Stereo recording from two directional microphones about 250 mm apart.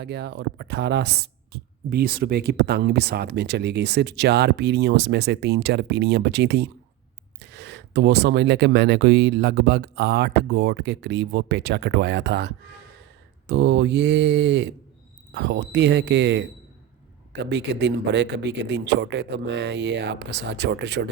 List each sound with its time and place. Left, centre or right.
0.0 s speech: right